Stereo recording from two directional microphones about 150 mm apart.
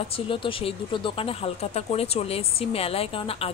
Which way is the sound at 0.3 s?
35° left (ahead or behind).